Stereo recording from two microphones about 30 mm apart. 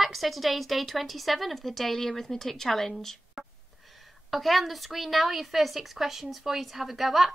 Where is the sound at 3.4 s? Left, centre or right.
Right.